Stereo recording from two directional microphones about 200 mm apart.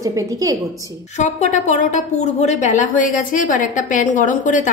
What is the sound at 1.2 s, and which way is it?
A woman's voice, 35° left (ahead or behind).